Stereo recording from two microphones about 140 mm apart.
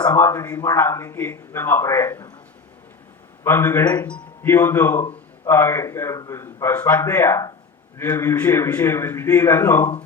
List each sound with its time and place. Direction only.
0.0 s a man's voice: 15° left (ahead or behind)
0.5 s a man's voice: 25° left (ahead or behind)
3.4 s a man's voice: 20° left (ahead or behind)